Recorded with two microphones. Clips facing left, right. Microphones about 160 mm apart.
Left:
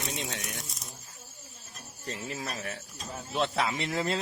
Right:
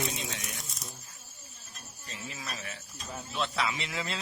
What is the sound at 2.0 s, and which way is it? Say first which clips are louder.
Stir: left 6 dB; 50° left (ahead or behind).